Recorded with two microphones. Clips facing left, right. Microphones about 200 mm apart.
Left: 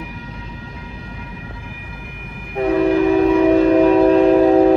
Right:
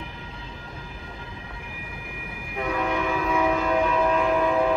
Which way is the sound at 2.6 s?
35° left (ahead or behind).